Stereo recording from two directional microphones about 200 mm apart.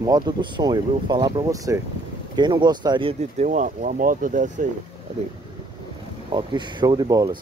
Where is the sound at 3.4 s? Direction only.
40° right (ahead or behind).